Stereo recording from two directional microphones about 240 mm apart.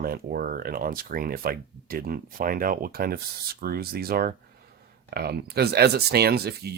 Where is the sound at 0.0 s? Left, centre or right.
Right.